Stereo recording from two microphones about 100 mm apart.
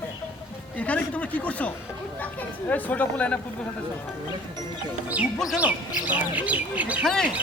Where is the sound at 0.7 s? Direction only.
15° left (ahead or behind).